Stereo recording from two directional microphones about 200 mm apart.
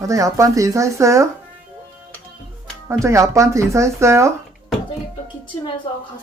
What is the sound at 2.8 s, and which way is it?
Speech, 15° right (ahead or behind).